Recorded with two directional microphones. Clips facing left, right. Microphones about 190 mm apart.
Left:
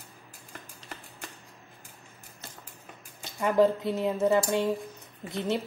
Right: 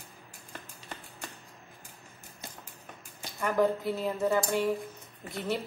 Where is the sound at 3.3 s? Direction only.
20° left (ahead or behind).